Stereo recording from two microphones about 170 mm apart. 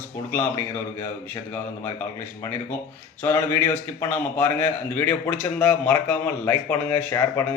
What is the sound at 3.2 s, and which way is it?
A man's voice, 15° left (ahead or behind).